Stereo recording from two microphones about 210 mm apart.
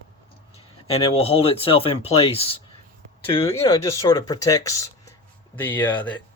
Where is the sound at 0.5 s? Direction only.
30° left (ahead or behind).